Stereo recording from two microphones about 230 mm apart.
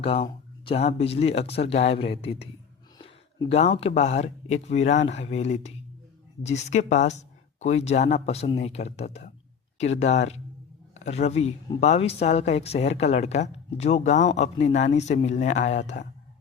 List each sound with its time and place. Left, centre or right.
0.0 s a man's voice: left